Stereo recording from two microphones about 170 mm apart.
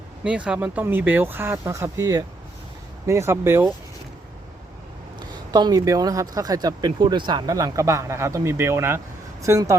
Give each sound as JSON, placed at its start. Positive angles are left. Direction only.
{"t": 0.3, "sound": "speech", "side_deg": -5}
{"t": 5.3, "sound": "speech", "side_deg": -25}